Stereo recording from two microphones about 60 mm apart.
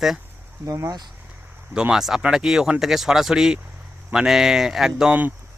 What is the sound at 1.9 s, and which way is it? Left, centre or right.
Speech, centre.